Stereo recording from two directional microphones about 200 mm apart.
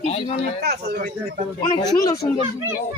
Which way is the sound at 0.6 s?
55° right (ahead or behind).